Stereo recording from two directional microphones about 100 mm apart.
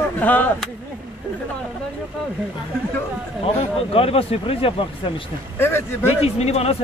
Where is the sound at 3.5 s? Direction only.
70° left (ahead or behind).